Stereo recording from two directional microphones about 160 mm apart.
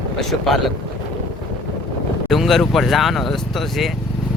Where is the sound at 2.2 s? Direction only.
Centre (ahead or behind).